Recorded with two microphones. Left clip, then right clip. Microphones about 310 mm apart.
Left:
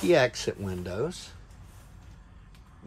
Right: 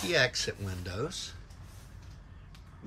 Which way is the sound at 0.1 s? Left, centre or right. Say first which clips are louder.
Left 5 dB; centre.